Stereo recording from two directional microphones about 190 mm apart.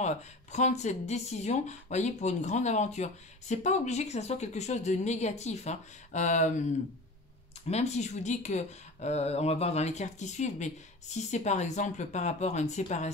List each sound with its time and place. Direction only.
0.0 s speech: 35° left (ahead or behind)
7.6 s speech: 35° left (ahead or behind)